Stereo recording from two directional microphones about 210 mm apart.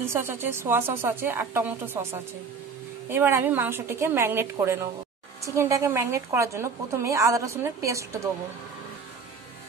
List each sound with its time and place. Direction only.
0.1 s a woman's voice: 10° right (ahead or behind)